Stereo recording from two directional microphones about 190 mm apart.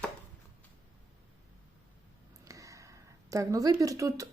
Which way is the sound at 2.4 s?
15° right (ahead or behind).